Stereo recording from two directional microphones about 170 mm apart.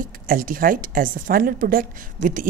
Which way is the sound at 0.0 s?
55° right (ahead or behind).